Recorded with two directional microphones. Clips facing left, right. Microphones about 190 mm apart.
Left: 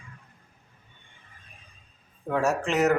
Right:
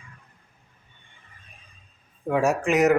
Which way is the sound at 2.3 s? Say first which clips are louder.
Right 4 dB; 10° right (ahead or behind).